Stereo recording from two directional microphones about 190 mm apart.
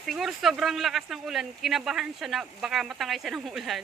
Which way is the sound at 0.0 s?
Centre (ahead or behind).